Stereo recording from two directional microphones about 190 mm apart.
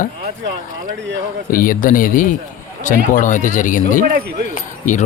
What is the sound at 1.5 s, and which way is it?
Speech, 45° left (ahead or behind).